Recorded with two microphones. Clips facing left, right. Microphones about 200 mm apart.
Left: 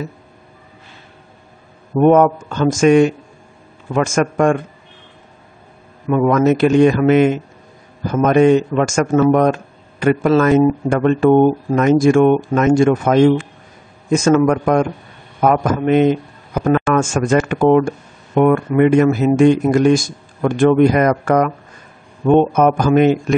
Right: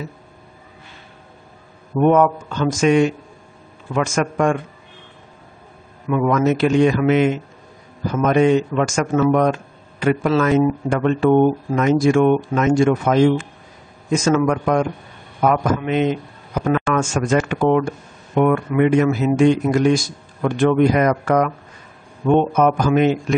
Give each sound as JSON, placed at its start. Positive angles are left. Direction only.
{"t": 2.0, "sound": "speech", "side_deg": 45}
{"t": 6.0, "sound": "a man's voice", "side_deg": 45}